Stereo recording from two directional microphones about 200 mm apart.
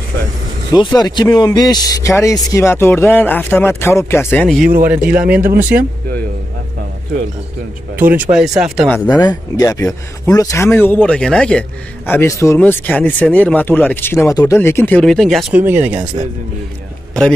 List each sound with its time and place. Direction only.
0.7 s speech: 20° left (ahead or behind)
4.8 s a man's voice: 10° right (ahead or behind)
7.9 s a man's voice: 10° right (ahead or behind)
8.7 s speech: 5° left (ahead or behind)
9.2 s speech: 20° left (ahead or behind); by 15.6 s centre (ahead or behind)
15.6 s a man's voice: 10° right (ahead or behind)